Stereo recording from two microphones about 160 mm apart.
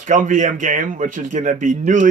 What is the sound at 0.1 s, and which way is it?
Speech, 50° right (ahead or behind).